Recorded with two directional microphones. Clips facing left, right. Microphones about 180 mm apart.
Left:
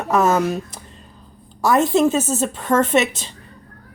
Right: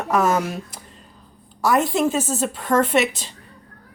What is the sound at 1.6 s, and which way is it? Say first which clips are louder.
A woman's voice: left 3 dB; 25° left (ahead or behind).